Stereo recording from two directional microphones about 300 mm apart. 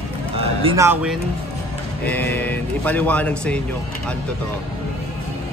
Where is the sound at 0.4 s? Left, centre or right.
Centre.